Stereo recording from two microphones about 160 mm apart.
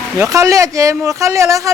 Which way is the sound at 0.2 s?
20° right (ahead or behind).